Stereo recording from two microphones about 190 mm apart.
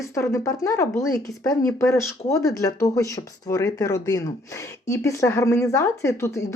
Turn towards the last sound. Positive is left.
turn(degrees=15)  # may be behind; listen again after turning